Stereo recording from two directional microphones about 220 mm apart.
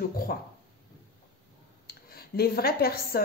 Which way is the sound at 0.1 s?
40° left (ahead or behind).